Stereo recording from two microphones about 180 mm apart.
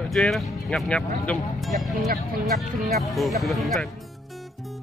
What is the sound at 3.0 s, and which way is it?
Speech, centre (ahead or behind).